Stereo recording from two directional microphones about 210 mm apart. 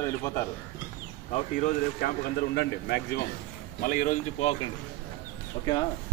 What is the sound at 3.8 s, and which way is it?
Speech, 40° left (ahead or behind).